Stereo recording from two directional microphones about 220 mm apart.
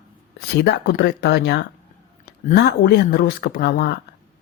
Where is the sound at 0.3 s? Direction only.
50° left (ahead or behind).